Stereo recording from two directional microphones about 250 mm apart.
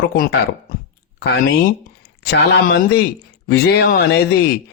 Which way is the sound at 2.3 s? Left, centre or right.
Left.